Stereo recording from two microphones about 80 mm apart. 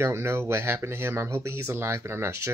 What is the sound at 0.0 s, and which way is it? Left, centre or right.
Speech, right.